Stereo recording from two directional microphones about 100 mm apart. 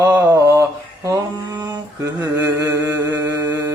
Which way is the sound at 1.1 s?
40° right (ahead or behind).